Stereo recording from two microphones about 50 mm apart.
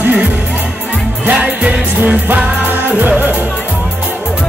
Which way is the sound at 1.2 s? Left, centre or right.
Right.